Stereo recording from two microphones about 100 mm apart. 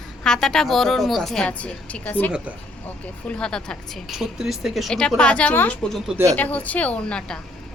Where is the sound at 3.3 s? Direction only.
10° left (ahead or behind).